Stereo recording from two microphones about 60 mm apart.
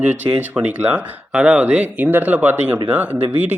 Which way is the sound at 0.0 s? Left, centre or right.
Right.